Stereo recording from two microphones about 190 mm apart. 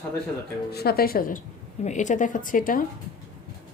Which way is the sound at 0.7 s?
55° left (ahead or behind).